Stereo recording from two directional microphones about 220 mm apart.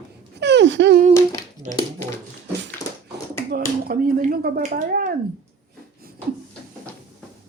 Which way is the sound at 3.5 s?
45° right (ahead or behind).